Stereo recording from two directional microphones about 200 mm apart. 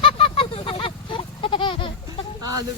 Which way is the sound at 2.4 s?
15° right (ahead or behind).